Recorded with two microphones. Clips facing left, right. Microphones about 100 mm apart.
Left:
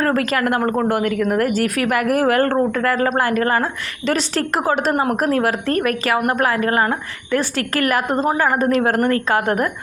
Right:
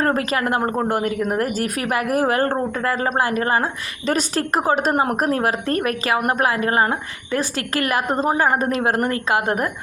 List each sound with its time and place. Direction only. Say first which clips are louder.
0.0 s speech: left 2 dB; 25° right (ahead or behind)
4.9 s speech: left 1 dB; 30° right (ahead or behind)